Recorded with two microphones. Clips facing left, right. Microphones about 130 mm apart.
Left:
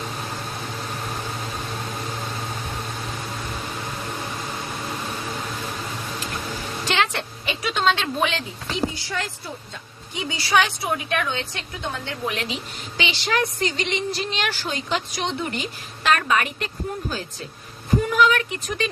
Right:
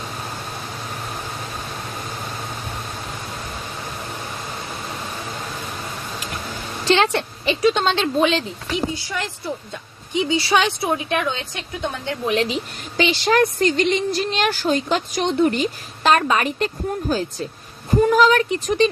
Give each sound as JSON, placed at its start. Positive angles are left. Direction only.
{"t": 6.8, "sound": "a woman's voice", "side_deg": -30}
{"t": 10.2, "sound": "a woman's voice", "side_deg": -20}
{"t": 12.5, "sound": "a woman's voice", "side_deg": -45}
{"t": 16.0, "sound": "a woman's voice", "side_deg": -30}